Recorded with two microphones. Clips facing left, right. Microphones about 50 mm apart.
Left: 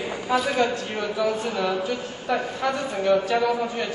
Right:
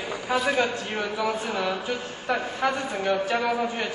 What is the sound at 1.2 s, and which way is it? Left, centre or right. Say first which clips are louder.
Speech: left 4 dB; right.